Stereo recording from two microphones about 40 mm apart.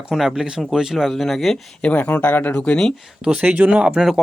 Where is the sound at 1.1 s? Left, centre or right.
Centre.